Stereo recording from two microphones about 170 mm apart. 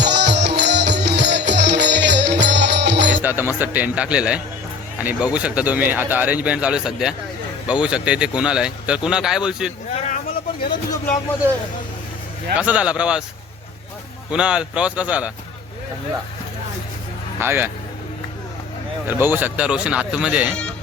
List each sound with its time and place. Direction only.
0.0 s music: 90° right
3.2 s a man's voice: 10° right (ahead or behind)
9.9 s a sound: 40° left (ahead or behind)
12.5 s a man's voice: 5° right (ahead or behind)
14.3 s a man's voice: 5° right (ahead or behind)
17.4 s a man's voice: 10° right (ahead or behind)
19.0 s a man's voice: 10° right (ahead or behind)